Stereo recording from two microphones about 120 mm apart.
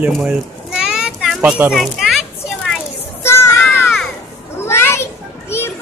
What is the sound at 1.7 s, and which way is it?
Speech, centre (ahead or behind).